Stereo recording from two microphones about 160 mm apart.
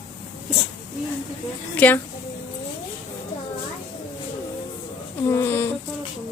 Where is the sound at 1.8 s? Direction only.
10° left (ahead or behind).